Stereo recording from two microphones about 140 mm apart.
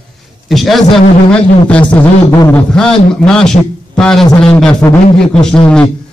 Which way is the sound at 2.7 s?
5° left (ahead or behind).